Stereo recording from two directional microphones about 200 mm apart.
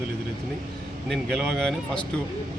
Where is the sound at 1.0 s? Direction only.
Centre (ahead or behind).